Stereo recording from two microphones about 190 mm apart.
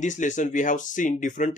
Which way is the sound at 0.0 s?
40° left (ahead or behind).